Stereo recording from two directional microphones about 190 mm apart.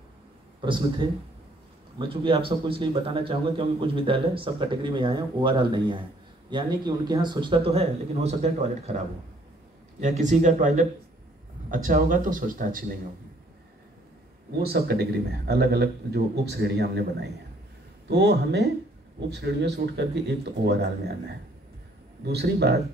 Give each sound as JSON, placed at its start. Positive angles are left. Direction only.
{"t": 0.6, "sound": "a man's voice", "side_deg": -25}
{"t": 14.6, "sound": "a man's voice", "side_deg": -55}